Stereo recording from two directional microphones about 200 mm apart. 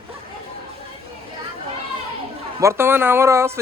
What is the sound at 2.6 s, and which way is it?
Speech, 15° right (ahead or behind).